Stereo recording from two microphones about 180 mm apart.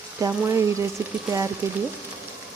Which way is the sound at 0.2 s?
15° right (ahead or behind).